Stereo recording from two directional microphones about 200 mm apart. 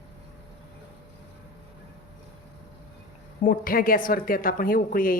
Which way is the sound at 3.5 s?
45° left (ahead or behind).